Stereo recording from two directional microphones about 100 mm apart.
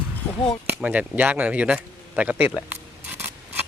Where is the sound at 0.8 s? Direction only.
15° right (ahead or behind).